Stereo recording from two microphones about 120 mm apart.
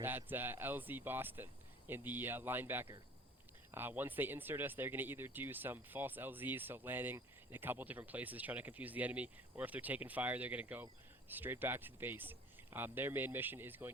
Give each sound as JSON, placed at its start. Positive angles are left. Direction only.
{"t": 0.0, "sound": "speech", "side_deg": -15}